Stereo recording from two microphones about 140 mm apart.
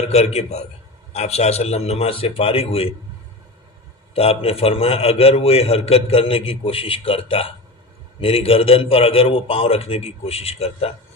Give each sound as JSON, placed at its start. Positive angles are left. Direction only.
{"t": 0.1, "sound": "a man's voice", "side_deg": 50}
{"t": 4.1, "sound": "a man's voice", "side_deg": 45}